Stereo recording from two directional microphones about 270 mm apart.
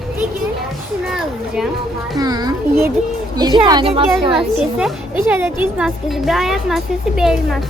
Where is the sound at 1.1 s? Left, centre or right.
Centre.